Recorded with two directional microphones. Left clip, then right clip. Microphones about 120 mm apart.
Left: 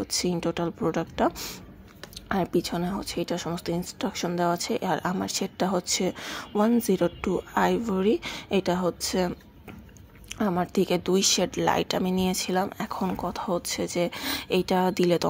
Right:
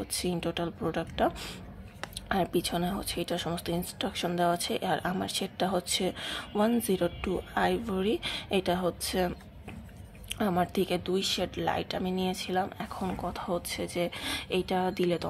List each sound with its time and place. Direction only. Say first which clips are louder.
0.0 s speech: left 5 dB; 35° left (ahead or behind)
10.3 s a woman's voice: left 1 dB; 25° left (ahead or behind)
10.7 s speech: left 5 dB; 35° left (ahead or behind)